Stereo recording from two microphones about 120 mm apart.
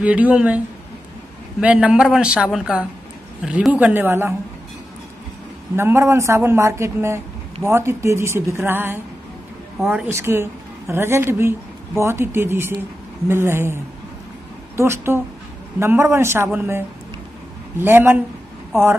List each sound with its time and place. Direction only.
0.0 s a man's voice: 10° right (ahead or behind)
1.6 s a man's voice: 10° right (ahead or behind)
5.8 s speech: 20° right (ahead or behind)
9.8 s speech: 5° right (ahead or behind)
10.0 s speech: 20° right (ahead or behind)
14.8 s a man's voice: 20° right (ahead or behind)